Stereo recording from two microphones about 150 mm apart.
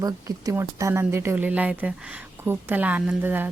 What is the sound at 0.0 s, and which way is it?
Speech, 25° right (ahead or behind).